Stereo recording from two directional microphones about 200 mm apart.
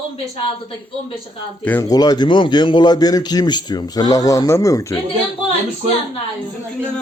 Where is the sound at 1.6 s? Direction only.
15° left (ahead or behind).